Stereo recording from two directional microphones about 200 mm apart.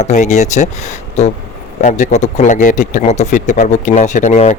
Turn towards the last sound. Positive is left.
turn(degrees=35)  # may be behind; listen again after turning